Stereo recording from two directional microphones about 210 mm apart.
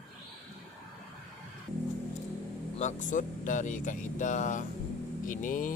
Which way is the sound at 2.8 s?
35° left (ahead or behind).